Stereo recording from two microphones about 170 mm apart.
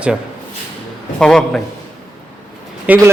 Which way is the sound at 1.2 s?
5° left (ahead or behind).